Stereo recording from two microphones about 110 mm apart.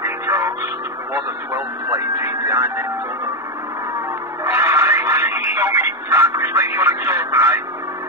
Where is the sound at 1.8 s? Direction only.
30° right (ahead or behind).